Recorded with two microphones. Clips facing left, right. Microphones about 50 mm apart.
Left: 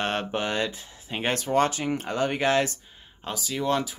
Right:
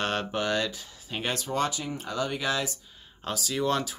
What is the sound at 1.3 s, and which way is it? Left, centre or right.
Speech, left.